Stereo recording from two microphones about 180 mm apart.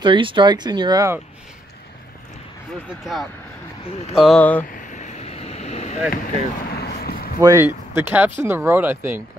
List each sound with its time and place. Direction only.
0.0 s speech: 25° right (ahead or behind)
4.1 s speech: centre (ahead or behind)
4.4 s speech: 10° left (ahead or behind)
4.7 s vehicle: 45° left (ahead or behind)
6.2 s vehicle: 60° left (ahead or behind)
7.3 s speech: 15° right (ahead or behind)